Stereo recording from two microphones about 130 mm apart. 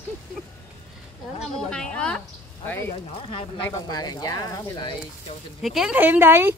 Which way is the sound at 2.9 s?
45° left (ahead or behind).